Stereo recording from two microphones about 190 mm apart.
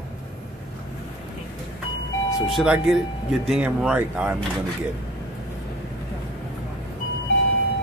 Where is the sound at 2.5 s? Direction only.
Centre (ahead or behind).